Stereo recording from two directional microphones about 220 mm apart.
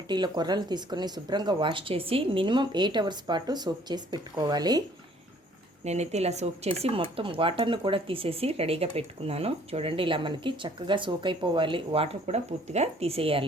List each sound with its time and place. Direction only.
0.1 s speech: 20° right (ahead or behind)
5.8 s speech: 30° right (ahead or behind)